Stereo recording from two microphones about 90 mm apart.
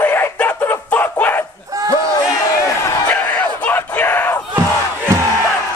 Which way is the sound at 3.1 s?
15° left (ahead or behind).